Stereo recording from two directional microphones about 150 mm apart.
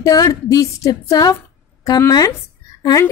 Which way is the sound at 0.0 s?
20° left (ahead or behind).